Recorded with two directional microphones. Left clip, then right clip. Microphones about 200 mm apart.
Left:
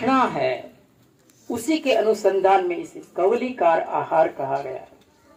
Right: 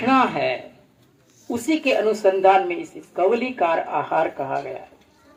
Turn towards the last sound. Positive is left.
turn(degrees=-30)  # may be behind; listen again after turning